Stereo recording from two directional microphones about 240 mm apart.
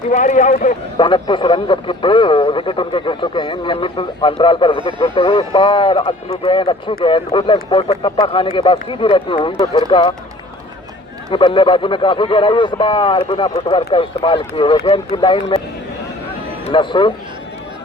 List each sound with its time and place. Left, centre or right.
0.1 s a man's voice: left
11.3 s a man's voice: left
16.7 s a man's voice: centre